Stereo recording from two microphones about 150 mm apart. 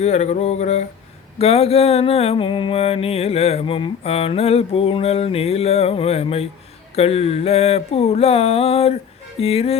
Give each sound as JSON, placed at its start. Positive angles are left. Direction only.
{"t": 0.0, "sound": "mantra", "side_deg": 50}